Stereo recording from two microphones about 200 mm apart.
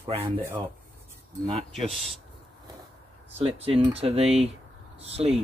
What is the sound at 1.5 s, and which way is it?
Speech, 30° right (ahead or behind).